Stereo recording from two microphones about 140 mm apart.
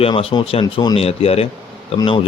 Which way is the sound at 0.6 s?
30° left (ahead or behind).